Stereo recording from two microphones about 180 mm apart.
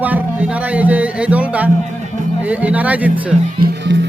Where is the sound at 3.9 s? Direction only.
90° right.